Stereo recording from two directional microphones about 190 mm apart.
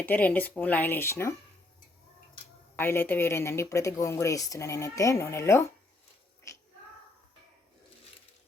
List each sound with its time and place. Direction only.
0.0 s speech: 10° left (ahead or behind)
2.7 s speech: 10° left (ahead or behind)
6.5 s a sound: 15° left (ahead or behind)